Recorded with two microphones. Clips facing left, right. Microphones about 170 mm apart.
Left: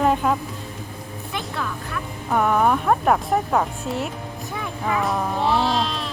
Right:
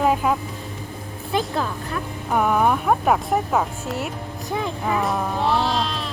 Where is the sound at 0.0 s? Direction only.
5° right (ahead or behind).